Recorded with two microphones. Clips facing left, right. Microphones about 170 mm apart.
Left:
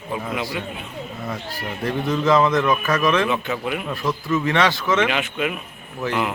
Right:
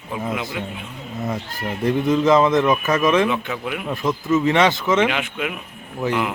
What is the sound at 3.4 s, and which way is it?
Speech, centre (ahead or behind).